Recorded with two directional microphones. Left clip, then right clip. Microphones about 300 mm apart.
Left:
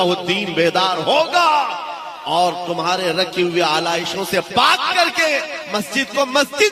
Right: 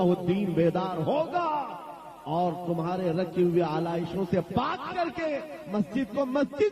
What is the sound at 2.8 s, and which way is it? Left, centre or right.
A man's voice, centre.